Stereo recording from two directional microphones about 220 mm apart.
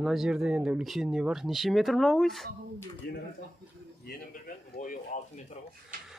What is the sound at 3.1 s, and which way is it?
Speech, 50° left (ahead or behind).